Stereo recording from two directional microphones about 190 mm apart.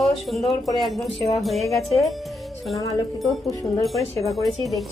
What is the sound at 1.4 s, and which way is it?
Speech, centre (ahead or behind).